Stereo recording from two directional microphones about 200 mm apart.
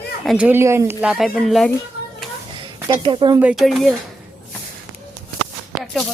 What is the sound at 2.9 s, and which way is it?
Speech, 25° right (ahead or behind).